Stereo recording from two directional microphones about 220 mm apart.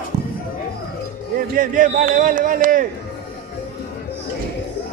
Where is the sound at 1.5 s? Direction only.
40° right (ahead or behind).